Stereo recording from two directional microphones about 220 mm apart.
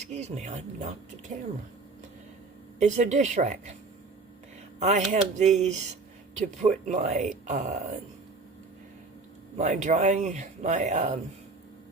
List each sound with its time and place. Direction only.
0.0 s speech: 30° right (ahead or behind)
2.7 s speech: 35° right (ahead or behind)
4.8 s speech: 30° right (ahead or behind)
9.6 s speech: 30° right (ahead or behind)